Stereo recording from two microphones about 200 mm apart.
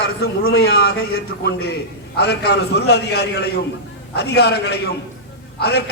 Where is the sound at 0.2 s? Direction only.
50° left (ahead or behind).